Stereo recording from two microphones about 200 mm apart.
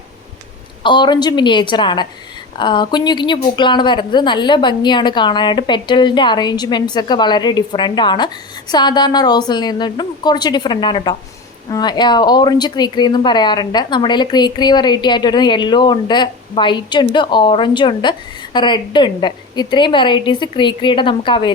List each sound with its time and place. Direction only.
0.8 s speech: 20° left (ahead or behind)